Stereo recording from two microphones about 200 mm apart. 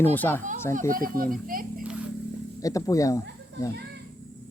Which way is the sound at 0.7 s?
40° right (ahead or behind).